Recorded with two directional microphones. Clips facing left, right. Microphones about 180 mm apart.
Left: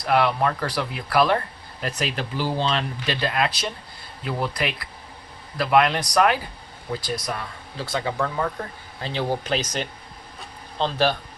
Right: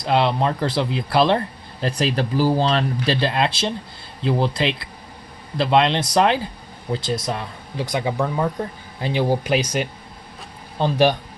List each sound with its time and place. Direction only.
0.0 s speech: 25° right (ahead or behind)